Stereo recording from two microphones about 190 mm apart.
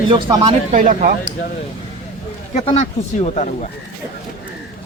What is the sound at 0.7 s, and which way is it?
Speech, 45° right (ahead or behind).